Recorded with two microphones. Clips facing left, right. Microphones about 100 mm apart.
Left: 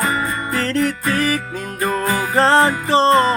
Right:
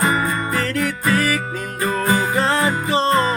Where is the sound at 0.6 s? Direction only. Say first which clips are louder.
Left 3 dB; 35° left (ahead or behind).